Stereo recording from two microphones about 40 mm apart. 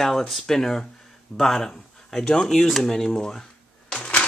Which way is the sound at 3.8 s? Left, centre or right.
Left.